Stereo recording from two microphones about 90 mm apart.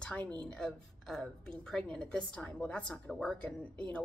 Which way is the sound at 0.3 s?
10° left (ahead or behind).